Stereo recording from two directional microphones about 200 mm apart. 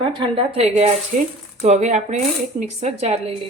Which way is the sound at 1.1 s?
45° right (ahead or behind).